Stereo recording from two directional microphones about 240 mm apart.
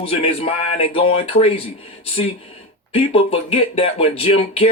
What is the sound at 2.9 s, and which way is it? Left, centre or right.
Speech, left.